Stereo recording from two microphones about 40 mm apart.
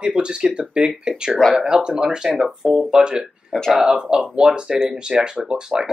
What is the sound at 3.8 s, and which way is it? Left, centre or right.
Speech, centre.